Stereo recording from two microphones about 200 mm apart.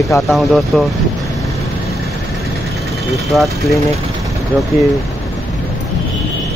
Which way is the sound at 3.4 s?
15° left (ahead or behind).